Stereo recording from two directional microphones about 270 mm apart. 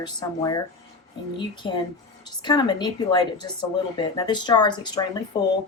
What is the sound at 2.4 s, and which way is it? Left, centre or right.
Speech, centre.